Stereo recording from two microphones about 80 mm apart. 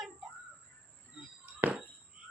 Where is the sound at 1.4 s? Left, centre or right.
Right.